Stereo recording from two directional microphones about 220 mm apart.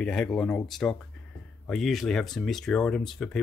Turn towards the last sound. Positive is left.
turn(degrees=0)  # may be behind; listen again after turning